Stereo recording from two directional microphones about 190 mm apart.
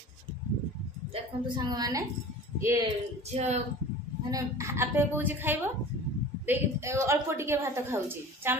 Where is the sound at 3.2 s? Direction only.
35° right (ahead or behind).